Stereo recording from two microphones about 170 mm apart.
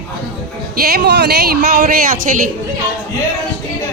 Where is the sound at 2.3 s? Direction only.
45° right (ahead or behind).